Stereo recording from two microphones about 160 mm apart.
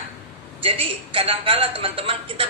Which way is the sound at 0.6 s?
35° right (ahead or behind).